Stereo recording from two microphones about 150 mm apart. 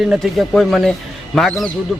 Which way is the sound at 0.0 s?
Centre (ahead or behind).